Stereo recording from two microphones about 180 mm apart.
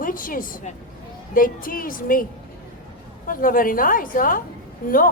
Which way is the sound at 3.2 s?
50° left (ahead or behind).